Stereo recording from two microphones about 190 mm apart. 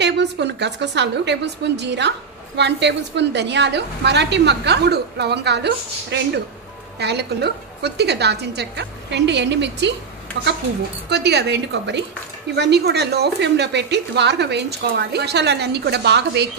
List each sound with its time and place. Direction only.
0.0 s a woman's voice: 65° right (ahead or behind)
11.1 s a woman's voice: 60° right (ahead or behind)